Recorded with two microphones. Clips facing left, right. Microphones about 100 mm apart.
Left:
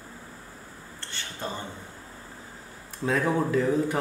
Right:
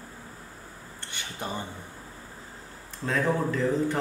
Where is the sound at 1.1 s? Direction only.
15° right (ahead or behind).